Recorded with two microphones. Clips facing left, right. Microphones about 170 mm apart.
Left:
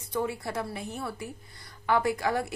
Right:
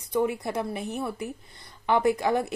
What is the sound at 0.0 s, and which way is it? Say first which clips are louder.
A woman's voice: right 5 dB; 20° right (ahead or behind).